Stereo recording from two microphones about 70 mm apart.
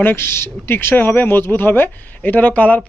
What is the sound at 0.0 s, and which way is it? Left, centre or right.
Speech, left.